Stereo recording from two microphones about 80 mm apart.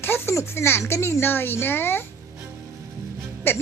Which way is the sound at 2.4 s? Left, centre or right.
Right.